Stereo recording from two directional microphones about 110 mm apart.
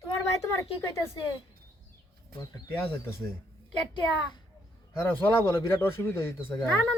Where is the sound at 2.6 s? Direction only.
20° left (ahead or behind).